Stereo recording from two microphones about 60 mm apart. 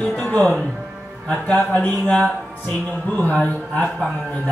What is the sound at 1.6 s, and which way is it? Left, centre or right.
Speech, left.